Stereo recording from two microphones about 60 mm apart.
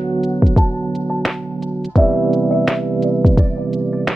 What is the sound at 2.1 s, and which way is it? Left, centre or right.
Music, centre.